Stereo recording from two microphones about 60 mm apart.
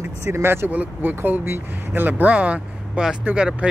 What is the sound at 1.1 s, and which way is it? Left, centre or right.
Speech, right.